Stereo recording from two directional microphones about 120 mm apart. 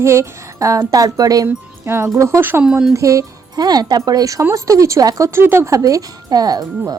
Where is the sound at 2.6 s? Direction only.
5° right (ahead or behind).